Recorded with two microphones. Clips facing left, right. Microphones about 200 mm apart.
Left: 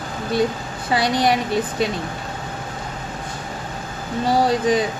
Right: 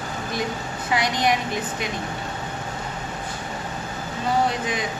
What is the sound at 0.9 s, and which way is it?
Speech, 30° left (ahead or behind).